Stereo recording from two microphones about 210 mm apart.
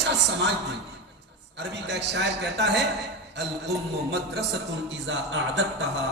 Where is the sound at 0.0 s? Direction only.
55° right (ahead or behind).